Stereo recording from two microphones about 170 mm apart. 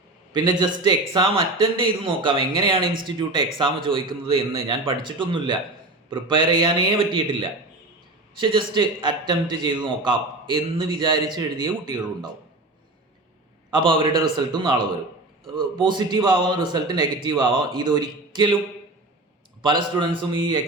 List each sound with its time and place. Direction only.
0.3 s a man's voice: 25° right (ahead or behind)
13.7 s a man's voice: 30° right (ahead or behind)
19.6 s a man's voice: 25° right (ahead or behind)